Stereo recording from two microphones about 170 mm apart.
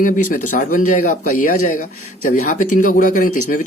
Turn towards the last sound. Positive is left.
turn(degrees=50)  # may be behind; listen again after turning